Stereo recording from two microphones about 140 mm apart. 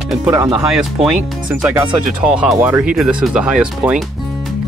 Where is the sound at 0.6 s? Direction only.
5° right (ahead or behind).